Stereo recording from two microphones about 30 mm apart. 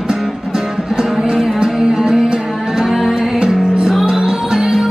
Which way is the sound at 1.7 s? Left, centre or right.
Right.